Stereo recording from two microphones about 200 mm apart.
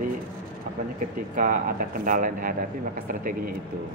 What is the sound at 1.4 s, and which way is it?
Speech, 45° right (ahead or behind).